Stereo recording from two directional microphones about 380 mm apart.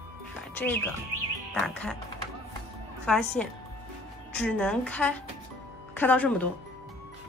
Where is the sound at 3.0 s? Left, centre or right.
Centre.